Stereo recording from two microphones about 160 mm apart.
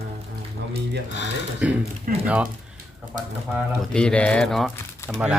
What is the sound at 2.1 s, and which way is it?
Speech, 60° right (ahead or behind).